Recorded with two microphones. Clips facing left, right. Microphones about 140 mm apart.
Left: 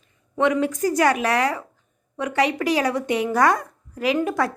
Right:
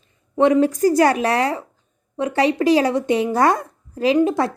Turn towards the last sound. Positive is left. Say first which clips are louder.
# right 5 dB
turn(degrees=-25)  # may be behind; listen again after turning